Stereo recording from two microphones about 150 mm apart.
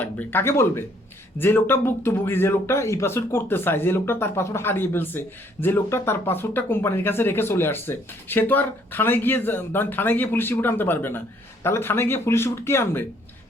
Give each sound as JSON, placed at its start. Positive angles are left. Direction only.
{"t": 0.0, "sound": "speech", "side_deg": 10}